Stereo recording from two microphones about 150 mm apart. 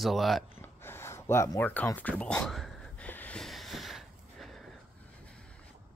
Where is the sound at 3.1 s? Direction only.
10° left (ahead or behind).